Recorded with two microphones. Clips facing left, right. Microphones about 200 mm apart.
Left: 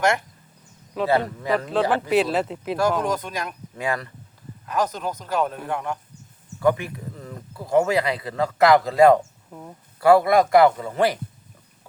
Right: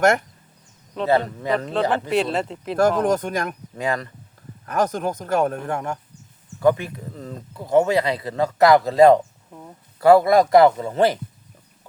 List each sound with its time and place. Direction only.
1.0 s speech: 20° right (ahead or behind)
1.7 s speech: centre (ahead or behind)
3.0 s a man's voice: 50° right (ahead or behind)
3.8 s speech: 20° right (ahead or behind)
4.6 s a man's voice: 50° right (ahead or behind)
6.6 s speech: 25° right (ahead or behind)
9.5 s speech: 5° left (ahead or behind)
10.0 s speech: 25° right (ahead or behind)